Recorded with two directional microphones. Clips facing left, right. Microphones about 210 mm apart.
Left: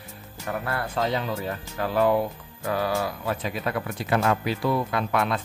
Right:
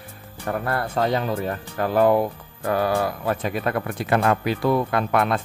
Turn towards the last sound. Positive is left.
turn(degrees=-50)  # may be behind; listen again after turning